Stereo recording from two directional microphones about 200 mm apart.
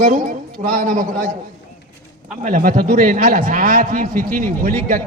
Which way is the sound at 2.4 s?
45° right (ahead or behind).